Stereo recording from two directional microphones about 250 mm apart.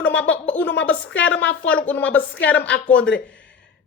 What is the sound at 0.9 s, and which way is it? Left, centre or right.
Speech, left.